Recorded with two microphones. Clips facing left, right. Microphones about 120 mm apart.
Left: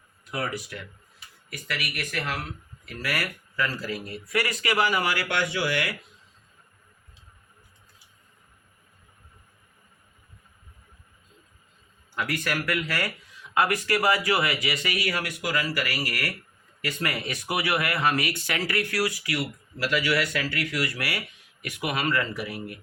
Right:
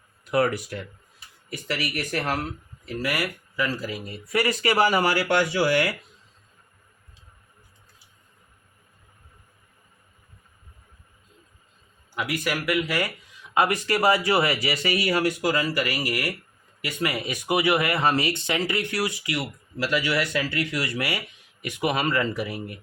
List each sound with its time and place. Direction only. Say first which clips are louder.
0.3 s speech: right 9 dB; 90° right
1.5 s speech: right 4 dB; 30° right (ahead or behind)
2.8 s speech: right 4 dB; 25° right (ahead or behind)
12.1 s speech: right 1 dB; 10° right (ahead or behind)